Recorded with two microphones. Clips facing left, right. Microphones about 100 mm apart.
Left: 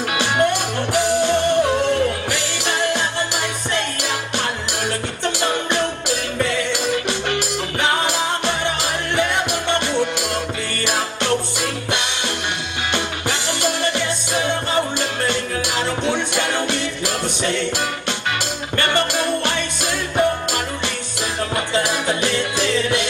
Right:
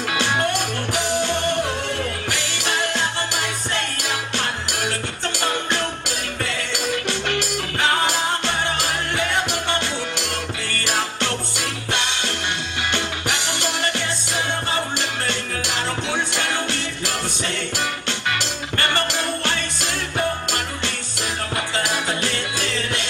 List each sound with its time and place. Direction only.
0.5 s music: 15° left (ahead or behind)
5.4 s music: 20° left (ahead or behind)
13.3 s music: 20° left (ahead or behind)
18.9 s music: 15° left (ahead or behind)